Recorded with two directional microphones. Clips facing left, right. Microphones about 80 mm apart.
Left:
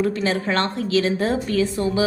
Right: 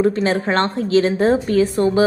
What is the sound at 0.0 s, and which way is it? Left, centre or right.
A woman's voice, right.